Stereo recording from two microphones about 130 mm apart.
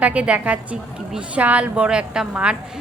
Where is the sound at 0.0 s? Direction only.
10° right (ahead or behind).